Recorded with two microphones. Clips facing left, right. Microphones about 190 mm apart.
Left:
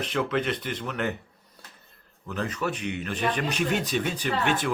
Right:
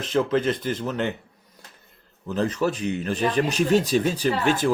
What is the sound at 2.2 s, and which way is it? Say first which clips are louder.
Speech: right 6 dB; 30° right (ahead or behind).